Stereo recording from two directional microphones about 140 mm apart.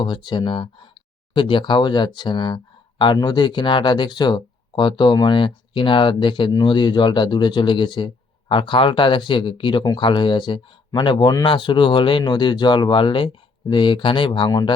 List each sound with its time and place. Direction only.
0.0 s speech: 35° left (ahead or behind)